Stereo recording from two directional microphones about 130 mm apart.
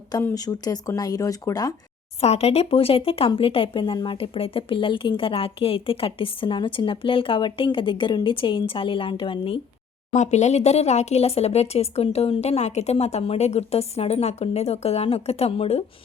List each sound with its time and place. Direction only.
0.3 s speech: 30° left (ahead or behind)
2.2 s speech: 55° left (ahead or behind)
10.1 s speech: 65° left (ahead or behind)